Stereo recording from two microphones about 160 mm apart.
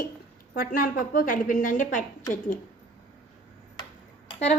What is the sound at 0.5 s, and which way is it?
A woman's voice, 60° left (ahead or behind).